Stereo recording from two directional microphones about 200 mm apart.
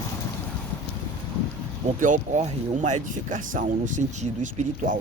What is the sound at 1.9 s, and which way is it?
Speech, 40° right (ahead or behind).